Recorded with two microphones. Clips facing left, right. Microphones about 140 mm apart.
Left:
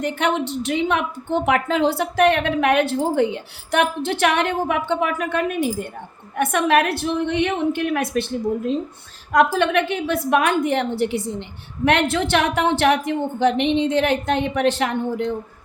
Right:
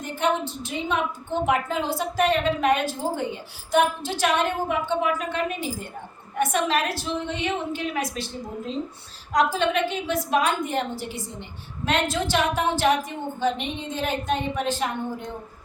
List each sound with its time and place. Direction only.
0.0 s a woman's voice: 70° left (ahead or behind)
9.3 s a woman's voice: 60° left (ahead or behind); by 15.3 s 75° left (ahead or behind)